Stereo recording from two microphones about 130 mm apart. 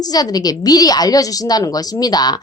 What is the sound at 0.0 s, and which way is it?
A woman's voice, 30° left (ahead or behind).